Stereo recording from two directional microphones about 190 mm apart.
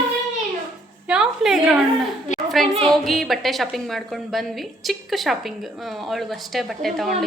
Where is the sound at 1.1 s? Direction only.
5° right (ahead or behind).